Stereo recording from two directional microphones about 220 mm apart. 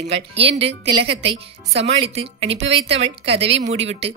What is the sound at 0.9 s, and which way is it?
Speech, 25° right (ahead or behind).